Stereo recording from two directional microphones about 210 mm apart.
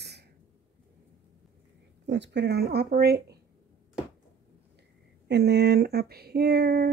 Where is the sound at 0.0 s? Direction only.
50° right (ahead or behind).